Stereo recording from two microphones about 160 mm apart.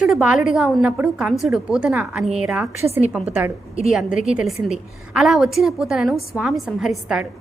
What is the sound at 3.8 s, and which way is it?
A woman's voice, centre (ahead or behind).